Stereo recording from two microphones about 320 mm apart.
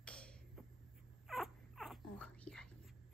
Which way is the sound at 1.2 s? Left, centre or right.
Centre.